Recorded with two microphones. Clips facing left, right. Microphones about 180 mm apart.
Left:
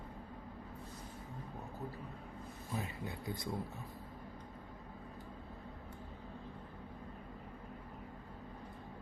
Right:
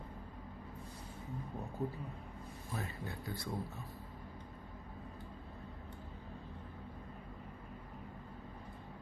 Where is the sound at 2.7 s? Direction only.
20° left (ahead or behind).